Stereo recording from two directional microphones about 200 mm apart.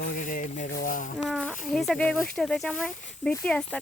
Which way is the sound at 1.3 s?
Centre (ahead or behind).